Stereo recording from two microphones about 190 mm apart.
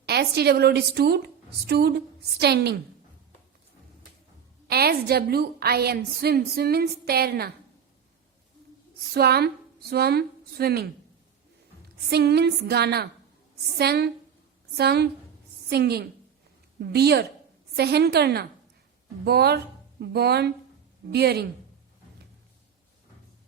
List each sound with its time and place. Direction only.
0.0 s a woman's voice: 60° right (ahead or behind)
4.7 s a woman's voice: 55° right (ahead or behind)
9.1 s a woman's voice: 55° right (ahead or behind)
11.9 s a woman's voice: 60° right (ahead or behind)